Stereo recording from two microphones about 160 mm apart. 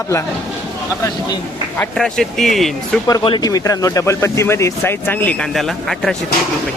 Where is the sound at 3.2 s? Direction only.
30° left (ahead or behind); by 5.3 s 10° left (ahead or behind).